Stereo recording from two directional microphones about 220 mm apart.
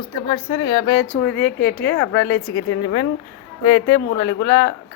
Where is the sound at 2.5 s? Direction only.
65° left (ahead or behind).